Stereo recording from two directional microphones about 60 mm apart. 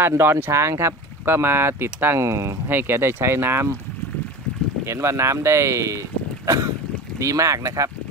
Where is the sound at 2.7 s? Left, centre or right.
Right.